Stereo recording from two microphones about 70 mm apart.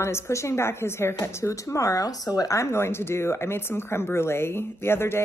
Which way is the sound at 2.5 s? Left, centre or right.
Left.